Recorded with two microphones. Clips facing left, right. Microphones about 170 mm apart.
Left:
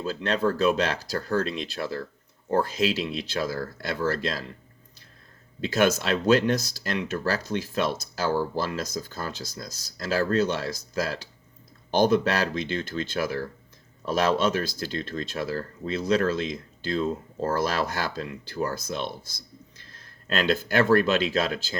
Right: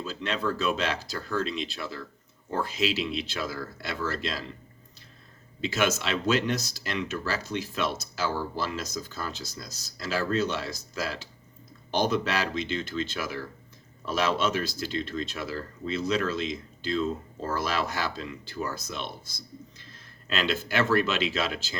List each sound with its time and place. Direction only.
0.0 s speech: 45° left (ahead or behind)
5.5 s speech: 50° left (ahead or behind)
20.2 s speech: 45° left (ahead or behind)